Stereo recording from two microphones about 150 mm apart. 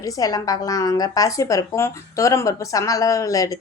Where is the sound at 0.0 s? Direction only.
25° left (ahead or behind).